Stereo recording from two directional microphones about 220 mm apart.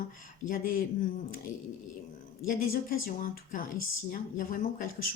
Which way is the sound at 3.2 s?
40° left (ahead or behind).